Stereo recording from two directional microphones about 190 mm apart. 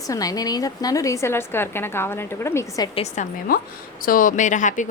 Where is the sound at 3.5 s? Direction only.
50° left (ahead or behind).